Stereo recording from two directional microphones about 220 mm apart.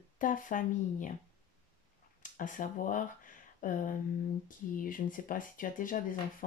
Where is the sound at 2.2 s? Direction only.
35° left (ahead or behind).